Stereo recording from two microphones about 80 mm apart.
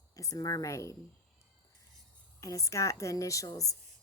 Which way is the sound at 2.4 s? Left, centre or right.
Left.